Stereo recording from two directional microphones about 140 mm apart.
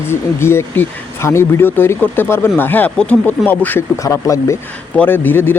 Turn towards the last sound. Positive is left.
turn(degrees=15)  # may be behind; listen again after turning